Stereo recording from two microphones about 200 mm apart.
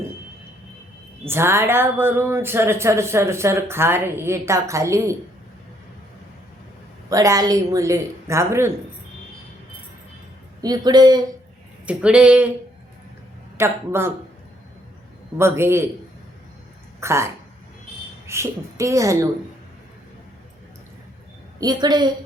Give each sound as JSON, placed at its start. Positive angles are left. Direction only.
{"t": 1.2, "sound": "a woman's voice", "side_deg": -10}
{"t": 7.1, "sound": "a woman's voice", "side_deg": -15}
{"t": 10.6, "sound": "speech", "side_deg": -20}
{"t": 11.9, "sound": "speech", "side_deg": -5}
{"t": 13.6, "sound": "a woman's voice", "side_deg": -10}
{"t": 15.4, "sound": "a woman's voice", "side_deg": -10}
{"t": 17.0, "sound": "a woman's voice", "side_deg": -15}
{"t": 21.6, "sound": "speech", "side_deg": -20}